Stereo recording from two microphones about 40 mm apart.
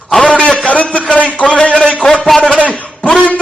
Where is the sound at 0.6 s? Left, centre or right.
Left.